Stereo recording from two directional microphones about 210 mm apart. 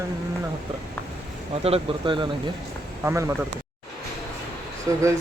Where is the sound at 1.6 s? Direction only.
25° right (ahead or behind).